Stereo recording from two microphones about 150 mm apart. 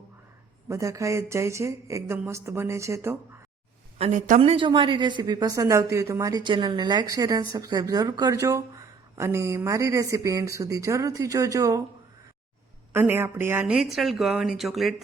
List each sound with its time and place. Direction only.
0.7 s a woman's voice: 20° right (ahead or behind)
3.9 s a woman's voice: 50° right (ahead or behind); by 11.8 s 20° right (ahead or behind)
12.9 s speech: 15° right (ahead or behind)
13.8 s speech: centre (ahead or behind)